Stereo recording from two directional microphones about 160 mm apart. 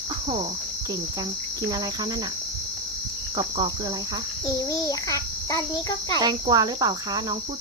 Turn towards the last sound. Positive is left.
turn(degrees=-25)  # may be behind; listen again after turning